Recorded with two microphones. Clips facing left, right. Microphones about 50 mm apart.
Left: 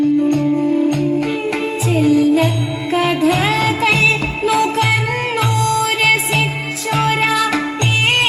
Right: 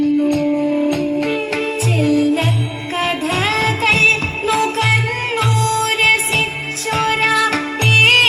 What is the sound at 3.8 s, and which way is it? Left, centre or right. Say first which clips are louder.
Music: right 3 dB; right.